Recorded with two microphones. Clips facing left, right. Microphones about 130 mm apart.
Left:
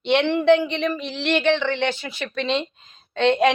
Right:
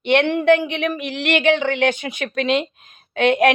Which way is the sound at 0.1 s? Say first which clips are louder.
Right 1 dB; 55° right (ahead or behind).